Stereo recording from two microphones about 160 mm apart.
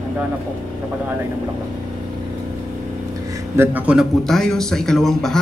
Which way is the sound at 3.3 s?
15° right (ahead or behind).